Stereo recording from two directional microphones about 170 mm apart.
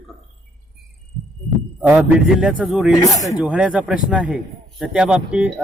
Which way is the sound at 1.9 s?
5° right (ahead or behind).